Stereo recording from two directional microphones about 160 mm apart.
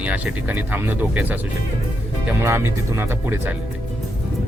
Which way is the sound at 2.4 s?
15° right (ahead or behind).